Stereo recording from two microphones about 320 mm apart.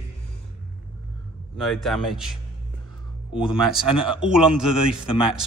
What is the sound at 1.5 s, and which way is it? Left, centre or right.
Speech, centre.